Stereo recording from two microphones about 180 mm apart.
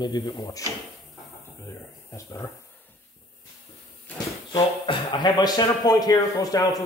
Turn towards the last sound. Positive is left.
turn(degrees=20)  # may be behind; listen again after turning